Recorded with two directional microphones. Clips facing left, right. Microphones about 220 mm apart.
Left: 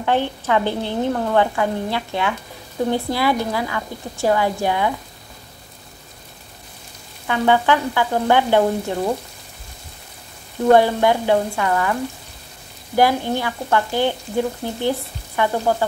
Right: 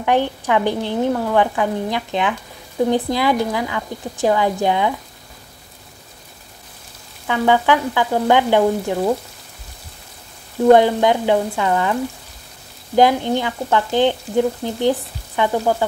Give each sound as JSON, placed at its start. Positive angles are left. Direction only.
{"t": 0.0, "sound": "speech", "side_deg": -15}
{"t": 7.2, "sound": "speech", "side_deg": -15}
{"t": 10.7, "sound": "speech", "side_deg": -15}
{"t": 12.9, "sound": "speech", "side_deg": -20}
{"t": 14.8, "sound": "frying", "side_deg": -15}